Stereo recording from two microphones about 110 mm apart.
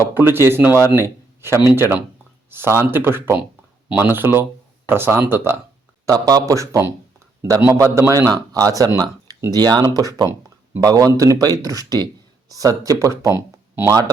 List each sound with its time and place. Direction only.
0.0 s speech: 20° right (ahead or behind)
6.1 s speech: 35° right (ahead or behind)